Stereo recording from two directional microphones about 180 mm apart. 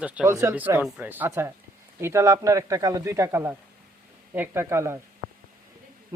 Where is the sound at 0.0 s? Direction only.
5° right (ahead or behind).